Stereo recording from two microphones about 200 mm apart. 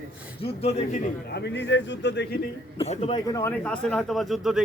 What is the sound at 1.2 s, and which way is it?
A man's voice, 55° left (ahead or behind).